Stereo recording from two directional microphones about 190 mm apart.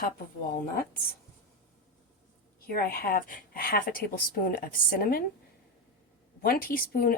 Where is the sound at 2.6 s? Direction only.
50° left (ahead or behind).